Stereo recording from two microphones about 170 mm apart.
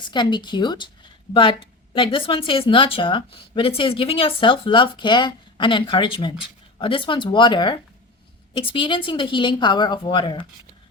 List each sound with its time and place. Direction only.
0.0 s a woman's voice: 25° left (ahead or behind)